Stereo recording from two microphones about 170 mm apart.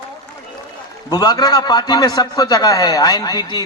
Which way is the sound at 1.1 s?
25° left (ahead or behind).